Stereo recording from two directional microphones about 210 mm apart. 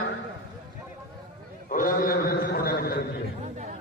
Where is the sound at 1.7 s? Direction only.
40° left (ahead or behind).